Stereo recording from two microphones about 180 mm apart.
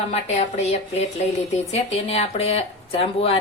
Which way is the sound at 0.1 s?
40° left (ahead or behind).